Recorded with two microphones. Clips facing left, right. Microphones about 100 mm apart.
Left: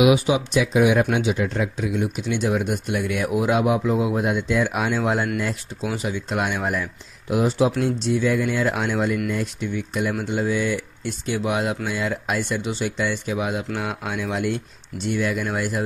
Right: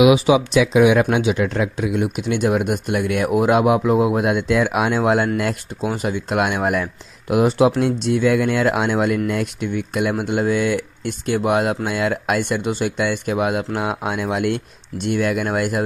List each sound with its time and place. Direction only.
0.1 s speech: 90° right; by 15.8 s 60° right (ahead or behind)